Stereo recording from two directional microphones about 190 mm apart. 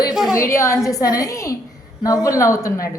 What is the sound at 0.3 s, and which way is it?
Speech, 15° left (ahead or behind).